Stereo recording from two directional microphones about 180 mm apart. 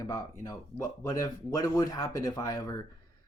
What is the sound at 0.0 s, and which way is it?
Speech, 20° left (ahead or behind).